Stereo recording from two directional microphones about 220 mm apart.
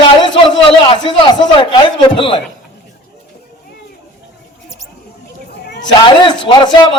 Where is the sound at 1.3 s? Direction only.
20° left (ahead or behind).